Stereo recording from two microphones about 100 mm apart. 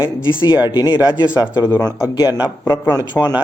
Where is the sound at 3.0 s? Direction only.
40° left (ahead or behind).